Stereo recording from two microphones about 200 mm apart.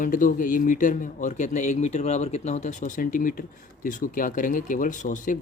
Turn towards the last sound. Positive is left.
turn(degrees=40)  # may be behind; listen again after turning